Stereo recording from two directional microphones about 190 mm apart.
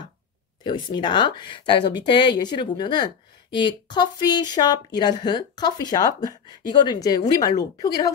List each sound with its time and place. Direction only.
0.7 s speech: 25° left (ahead or behind)